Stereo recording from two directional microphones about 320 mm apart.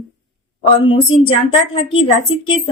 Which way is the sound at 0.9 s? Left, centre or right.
Centre.